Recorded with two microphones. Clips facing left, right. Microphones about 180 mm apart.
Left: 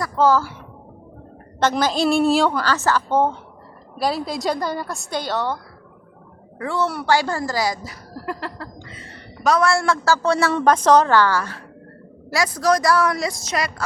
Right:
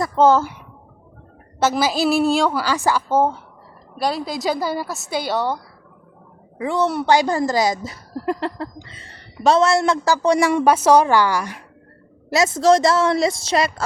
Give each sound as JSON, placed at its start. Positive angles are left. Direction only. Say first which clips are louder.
{"t": 0.0, "sound": "speech", "louder": "right 3 dB", "side_deg": -25}
{"t": 1.5, "sound": "a woman's voice", "louder": "right 1 dB", "side_deg": -5}
{"t": 6.6, "sound": "speech", "louder": "right 3 dB", "side_deg": -20}